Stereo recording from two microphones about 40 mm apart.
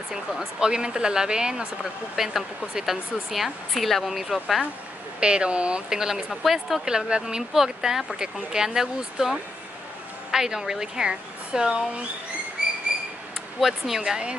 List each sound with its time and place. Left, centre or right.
0.6 s speech: right
2.1 s speech: centre
5.2 s speech: right
5.9 s a woman's voice: centre
6.8 s speech: centre
7.5 s a woman's voice: centre
10.3 s a woman's voice: centre
12.6 s train: right
13.6 s a woman's voice: centre